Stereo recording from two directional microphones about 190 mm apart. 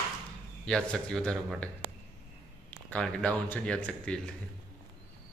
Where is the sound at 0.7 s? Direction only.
5° left (ahead or behind).